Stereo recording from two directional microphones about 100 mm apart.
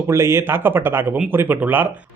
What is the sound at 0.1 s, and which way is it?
Speech, 25° right (ahead or behind).